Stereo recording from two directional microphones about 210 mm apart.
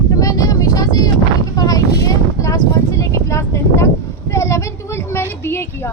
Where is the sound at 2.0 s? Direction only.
15° left (ahead or behind).